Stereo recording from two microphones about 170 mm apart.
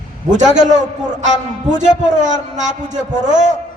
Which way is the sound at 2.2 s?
45° right (ahead or behind).